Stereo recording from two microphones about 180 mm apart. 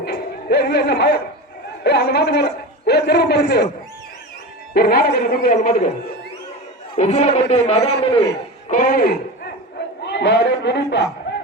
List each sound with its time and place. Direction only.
0.0 s music: 60° left (ahead or behind)
1.8 s a man's voice: 65° left (ahead or behind)
4.7 s speech: 60° left (ahead or behind)
6.9 s speech: 40° left (ahead or behind)
8.7 s speech: 50° left (ahead or behind)
10.0 s a man's voice: 75° left (ahead or behind)
11.3 s a sound: 75° left (ahead or behind)